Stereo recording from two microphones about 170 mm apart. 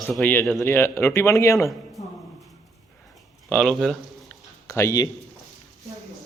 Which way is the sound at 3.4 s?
5° left (ahead or behind).